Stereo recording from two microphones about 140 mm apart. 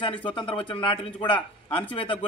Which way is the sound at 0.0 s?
35° left (ahead or behind).